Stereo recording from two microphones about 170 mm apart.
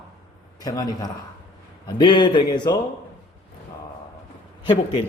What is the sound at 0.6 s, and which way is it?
A man's voice, 20° left (ahead or behind).